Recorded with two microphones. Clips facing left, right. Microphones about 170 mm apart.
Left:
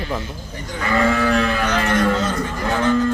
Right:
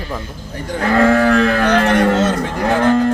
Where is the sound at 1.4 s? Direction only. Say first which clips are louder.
Right 6 dB; 70° right (ahead or behind).